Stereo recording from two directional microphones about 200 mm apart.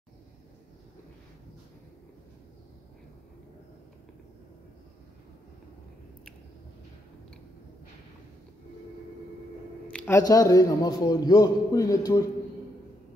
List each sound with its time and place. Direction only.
9.9 s a man's voice: 10° left (ahead or behind)